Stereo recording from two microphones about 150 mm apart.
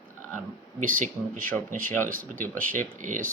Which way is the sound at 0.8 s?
60° right (ahead or behind).